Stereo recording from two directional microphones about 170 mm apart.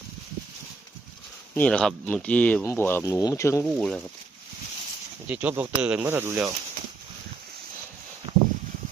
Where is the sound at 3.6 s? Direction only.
Centre (ahead or behind).